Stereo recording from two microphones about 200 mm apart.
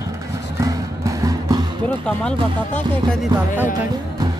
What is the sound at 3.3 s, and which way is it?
Speech, 20° right (ahead or behind).